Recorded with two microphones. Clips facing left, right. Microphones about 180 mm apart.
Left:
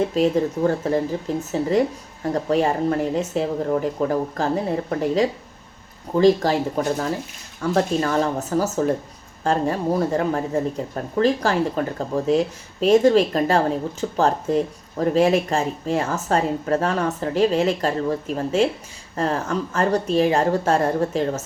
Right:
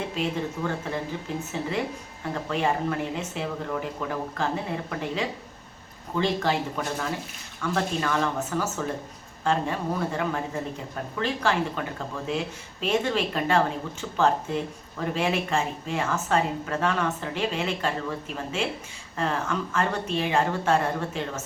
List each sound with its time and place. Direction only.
0.1 s speech: 40° left (ahead or behind)